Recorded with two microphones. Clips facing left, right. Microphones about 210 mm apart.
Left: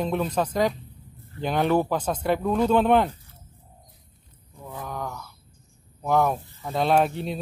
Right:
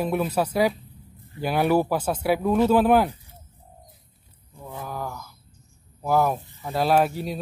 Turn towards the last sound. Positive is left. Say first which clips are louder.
# right 1 dB
turn(degrees=-5)  # may be behind; listen again after turning